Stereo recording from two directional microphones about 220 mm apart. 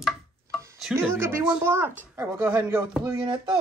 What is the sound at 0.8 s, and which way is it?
Speech, 5° right (ahead or behind).